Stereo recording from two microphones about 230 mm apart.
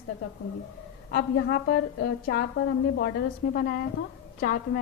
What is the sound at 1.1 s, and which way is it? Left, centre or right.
A woman's voice, left.